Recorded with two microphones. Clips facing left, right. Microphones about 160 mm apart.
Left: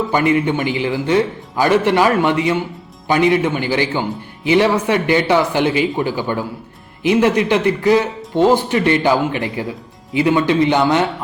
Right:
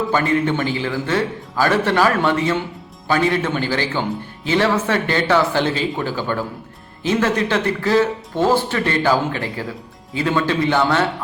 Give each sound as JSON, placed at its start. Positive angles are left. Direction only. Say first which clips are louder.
{"t": 0.1, "sound": "a man's voice", "louder": "left 4 dB", "side_deg": 15}